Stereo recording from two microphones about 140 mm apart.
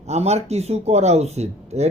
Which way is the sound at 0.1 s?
50° right (ahead or behind).